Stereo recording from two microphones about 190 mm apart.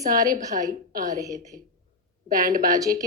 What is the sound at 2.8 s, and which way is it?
Speech, 20° right (ahead or behind).